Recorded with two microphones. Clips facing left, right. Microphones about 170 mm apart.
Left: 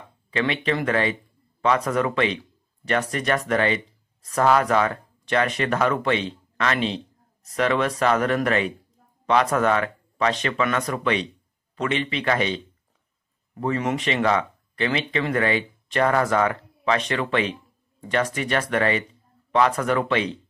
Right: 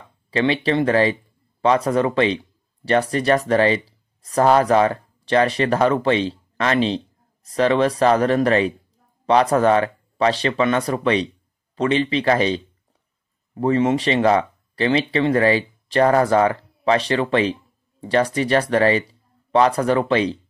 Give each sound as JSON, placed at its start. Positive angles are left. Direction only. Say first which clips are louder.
{"t": 0.3, "sound": "speech", "louder": "right 5 dB", "side_deg": -35}